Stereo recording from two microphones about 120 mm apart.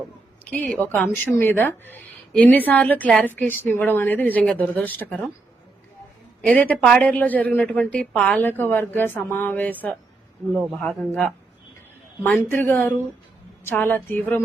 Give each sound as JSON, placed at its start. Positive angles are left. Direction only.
{"t": 0.5, "sound": "a woman's voice", "side_deg": 10}
{"t": 6.4, "sound": "a woman's voice", "side_deg": 10}
{"t": 12.2, "sound": "a woman's voice", "side_deg": 15}